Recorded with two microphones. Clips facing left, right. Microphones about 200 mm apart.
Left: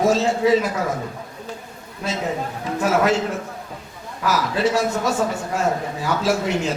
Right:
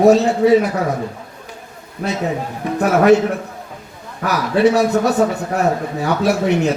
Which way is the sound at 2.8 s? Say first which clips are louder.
Right 6 dB; 60° right (ahead or behind).